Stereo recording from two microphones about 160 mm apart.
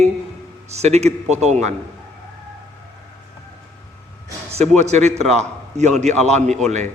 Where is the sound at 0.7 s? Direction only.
45° right (ahead or behind).